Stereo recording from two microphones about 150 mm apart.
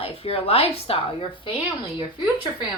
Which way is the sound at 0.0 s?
40° left (ahead or behind).